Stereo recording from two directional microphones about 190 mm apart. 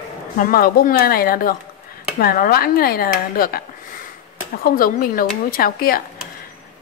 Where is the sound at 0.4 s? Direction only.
50° left (ahead or behind).